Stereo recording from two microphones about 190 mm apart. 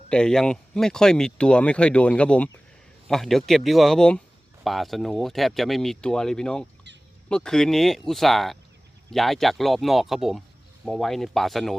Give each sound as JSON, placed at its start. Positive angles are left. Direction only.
{"t": 0.1, "sound": "speech", "side_deg": 5}